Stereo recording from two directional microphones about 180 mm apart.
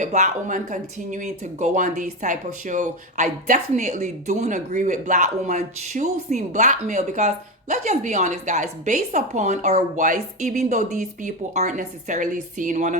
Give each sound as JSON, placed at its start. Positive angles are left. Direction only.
{"t": 0.0, "sound": "speech", "side_deg": -40}